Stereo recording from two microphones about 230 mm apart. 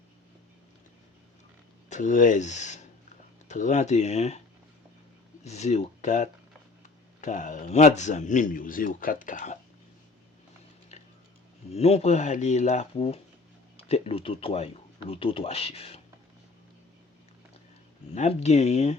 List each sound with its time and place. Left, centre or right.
1.9 s speech: left
5.4 s speech: left
10.9 s tick-tock: left
11.7 s speech: left
18.1 s speech: left